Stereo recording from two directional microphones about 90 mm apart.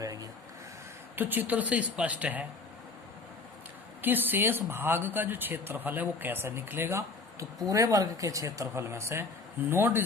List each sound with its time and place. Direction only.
0.0 s a sound: 40° right (ahead or behind)
1.1 s speech: 20° right (ahead or behind)
4.0 s speech: 20° right (ahead or behind)